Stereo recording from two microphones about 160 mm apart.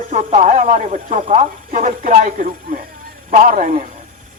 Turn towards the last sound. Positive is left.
turn(degrees=-50)  # may be behind; listen again after turning